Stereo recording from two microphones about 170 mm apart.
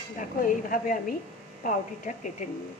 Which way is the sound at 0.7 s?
55° left (ahead or behind).